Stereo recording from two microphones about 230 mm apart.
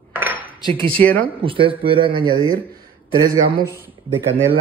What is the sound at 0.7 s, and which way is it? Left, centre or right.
Speech, right.